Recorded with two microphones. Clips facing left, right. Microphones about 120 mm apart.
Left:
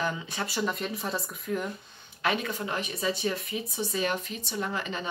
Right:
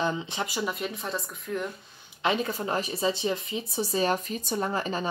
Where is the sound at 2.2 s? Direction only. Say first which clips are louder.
Right 2 dB; 30° right (ahead or behind).